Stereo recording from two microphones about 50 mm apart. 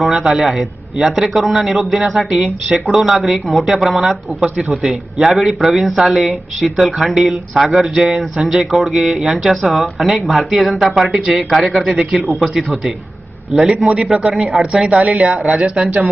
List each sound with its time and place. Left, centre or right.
0.0 s speech: centre
13.8 s speech: right
14.3 s speech: centre
14.6 s speech: right